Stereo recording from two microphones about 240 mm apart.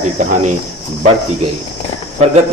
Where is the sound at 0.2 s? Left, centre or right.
Right.